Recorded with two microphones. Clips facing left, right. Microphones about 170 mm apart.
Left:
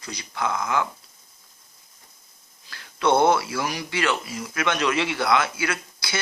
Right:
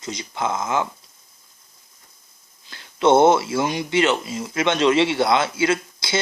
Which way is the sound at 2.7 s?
25° right (ahead or behind).